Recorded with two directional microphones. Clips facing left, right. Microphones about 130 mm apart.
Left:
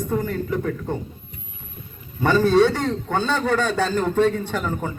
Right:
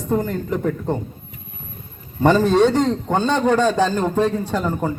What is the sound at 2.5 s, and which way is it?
A man's voice, 50° right (ahead or behind).